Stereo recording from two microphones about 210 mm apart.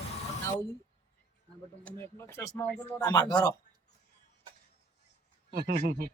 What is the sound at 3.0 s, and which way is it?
Speech, 20° left (ahead or behind).